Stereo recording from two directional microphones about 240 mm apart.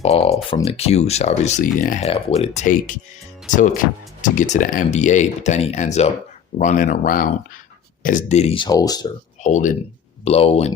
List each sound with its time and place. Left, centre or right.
0.0 s speech: left
9.4 s speech: left